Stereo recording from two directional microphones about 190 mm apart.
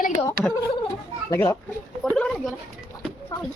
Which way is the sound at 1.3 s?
15° left (ahead or behind).